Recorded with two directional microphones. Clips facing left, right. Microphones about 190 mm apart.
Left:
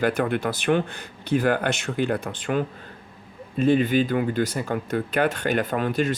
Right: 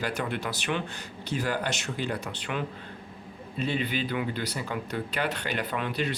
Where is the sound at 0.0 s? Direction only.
55° left (ahead or behind).